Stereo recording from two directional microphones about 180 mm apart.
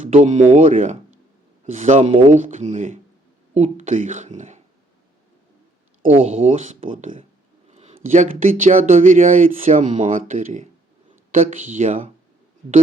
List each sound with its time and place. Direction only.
0.0 s speech: 40° right (ahead or behind)
6.3 s speech: 35° right (ahead or behind)